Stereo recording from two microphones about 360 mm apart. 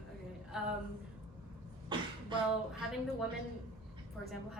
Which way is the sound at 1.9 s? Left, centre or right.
Centre.